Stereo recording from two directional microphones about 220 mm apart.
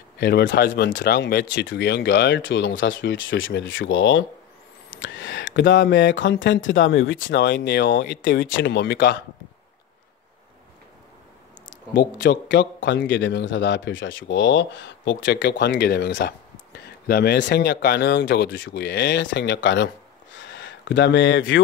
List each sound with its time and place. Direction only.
0.2 s a man's voice: 45° left (ahead or behind)
11.9 s a man's voice: 50° left (ahead or behind)